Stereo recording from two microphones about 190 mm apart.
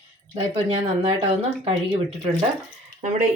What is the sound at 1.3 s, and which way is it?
A woman's voice, 30° right (ahead or behind).